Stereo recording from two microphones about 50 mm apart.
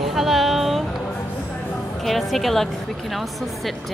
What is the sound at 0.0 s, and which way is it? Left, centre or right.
Music, centre.